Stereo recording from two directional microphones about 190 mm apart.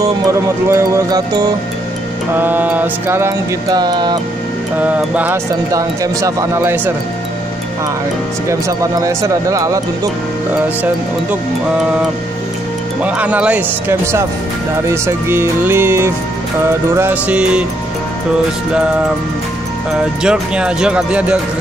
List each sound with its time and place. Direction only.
0.2 s speech: 15° right (ahead or behind)
2.3 s speech: 10° right (ahead or behind)
4.8 s speech: 10° right (ahead or behind)
8.5 s speech: 15° right (ahead or behind)
13.0 s speech: 5° right (ahead or behind)
20.2 s speech: 5° right (ahead or behind)